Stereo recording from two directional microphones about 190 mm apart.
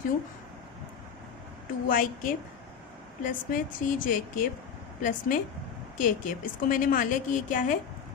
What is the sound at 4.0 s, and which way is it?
A woman's voice, 45° left (ahead or behind).